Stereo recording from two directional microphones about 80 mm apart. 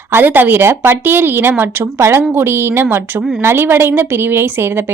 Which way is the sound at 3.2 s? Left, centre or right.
Centre.